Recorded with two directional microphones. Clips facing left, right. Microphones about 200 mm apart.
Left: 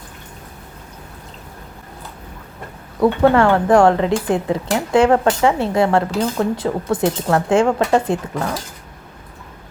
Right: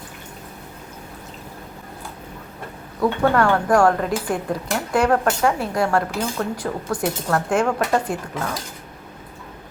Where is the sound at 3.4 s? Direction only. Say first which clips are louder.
Left 2 dB; 25° left (ahead or behind).